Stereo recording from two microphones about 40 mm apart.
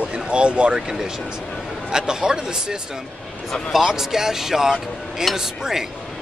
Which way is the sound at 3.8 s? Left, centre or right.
Centre.